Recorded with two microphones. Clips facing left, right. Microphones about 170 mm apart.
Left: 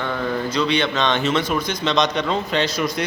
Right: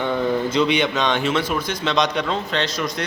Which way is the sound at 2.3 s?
5° left (ahead or behind).